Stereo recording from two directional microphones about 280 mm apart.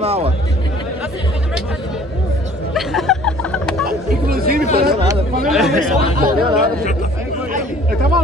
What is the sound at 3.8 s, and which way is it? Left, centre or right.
Speech, right.